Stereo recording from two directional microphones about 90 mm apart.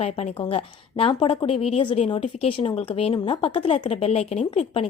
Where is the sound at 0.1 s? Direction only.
90° left.